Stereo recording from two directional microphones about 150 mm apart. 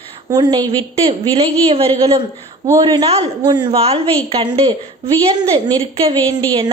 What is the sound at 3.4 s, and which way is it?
Speech, 30° right (ahead or behind).